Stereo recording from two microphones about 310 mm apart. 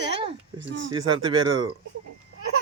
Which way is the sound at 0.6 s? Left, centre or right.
Right.